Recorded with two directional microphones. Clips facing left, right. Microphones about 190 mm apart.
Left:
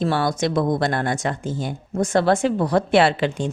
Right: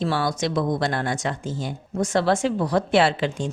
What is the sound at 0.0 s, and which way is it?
Speech, 50° left (ahead or behind).